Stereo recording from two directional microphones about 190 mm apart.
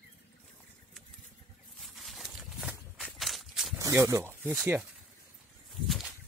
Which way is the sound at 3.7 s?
15° right (ahead or behind).